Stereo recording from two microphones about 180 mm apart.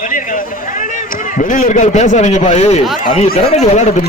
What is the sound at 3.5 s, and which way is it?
Speech, 40° left (ahead or behind).